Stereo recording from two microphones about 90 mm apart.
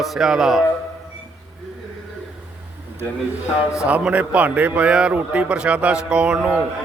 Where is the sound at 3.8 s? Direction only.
15° right (ahead or behind).